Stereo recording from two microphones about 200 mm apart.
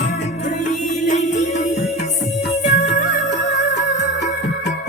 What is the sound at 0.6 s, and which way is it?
Music, 35° left (ahead or behind).